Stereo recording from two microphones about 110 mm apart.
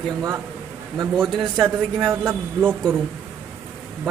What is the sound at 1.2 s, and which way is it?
Speech, 5° left (ahead or behind).